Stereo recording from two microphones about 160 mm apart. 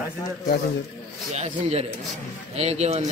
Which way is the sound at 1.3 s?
40° right (ahead or behind).